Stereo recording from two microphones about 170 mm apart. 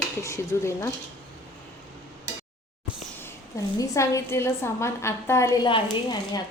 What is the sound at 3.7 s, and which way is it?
A woman's voice, 20° left (ahead or behind).